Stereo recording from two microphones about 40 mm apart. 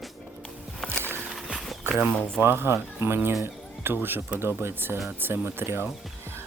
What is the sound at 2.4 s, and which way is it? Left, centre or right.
Speech, right.